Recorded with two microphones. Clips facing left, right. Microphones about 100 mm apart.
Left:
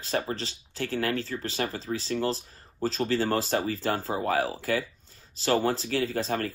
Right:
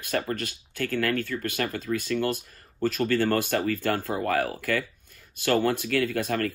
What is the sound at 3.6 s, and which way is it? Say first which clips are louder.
Speech: right 2 dB; 55° right (ahead or behind).